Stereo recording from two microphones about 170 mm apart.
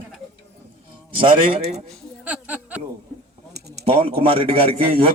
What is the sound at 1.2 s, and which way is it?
Speech, 40° right (ahead or behind).